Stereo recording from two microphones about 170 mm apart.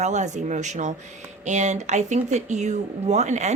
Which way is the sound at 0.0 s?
45° right (ahead or behind).